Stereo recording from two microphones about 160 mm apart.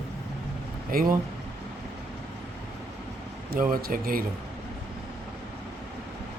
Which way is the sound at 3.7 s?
65° right (ahead or behind).